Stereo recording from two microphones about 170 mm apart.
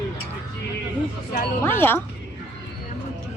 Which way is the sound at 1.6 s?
15° left (ahead or behind).